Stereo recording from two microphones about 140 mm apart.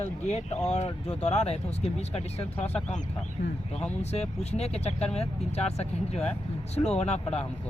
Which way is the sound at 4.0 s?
50° left (ahead or behind).